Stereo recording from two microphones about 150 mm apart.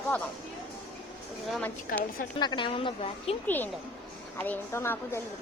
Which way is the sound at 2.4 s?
30° left (ahead or behind).